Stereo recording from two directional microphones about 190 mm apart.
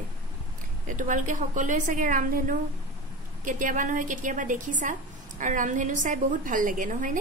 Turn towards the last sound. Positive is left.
turn(degrees=-45)  # may be behind; listen again after turning